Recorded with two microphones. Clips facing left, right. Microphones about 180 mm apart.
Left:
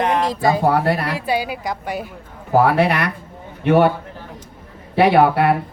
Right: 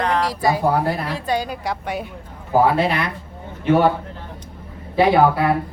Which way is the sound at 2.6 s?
70° left (ahead or behind).